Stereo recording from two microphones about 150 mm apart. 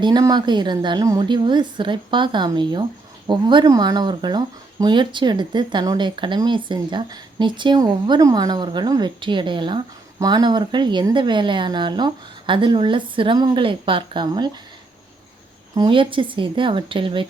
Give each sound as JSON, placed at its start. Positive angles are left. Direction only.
{"t": 0.0, "sound": "speech", "side_deg": -30}
{"t": 15.7, "sound": "speech", "side_deg": -30}